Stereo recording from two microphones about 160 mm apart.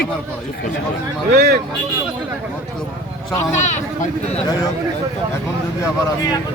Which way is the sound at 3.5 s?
45° left (ahead or behind).